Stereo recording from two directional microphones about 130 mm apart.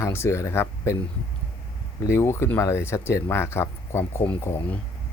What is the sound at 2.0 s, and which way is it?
Speech, 20° left (ahead or behind).